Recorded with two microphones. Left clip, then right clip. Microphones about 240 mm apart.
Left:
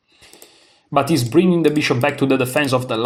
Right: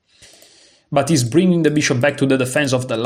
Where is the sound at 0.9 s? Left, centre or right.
Right.